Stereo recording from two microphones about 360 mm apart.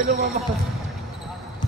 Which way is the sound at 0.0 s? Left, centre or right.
Right.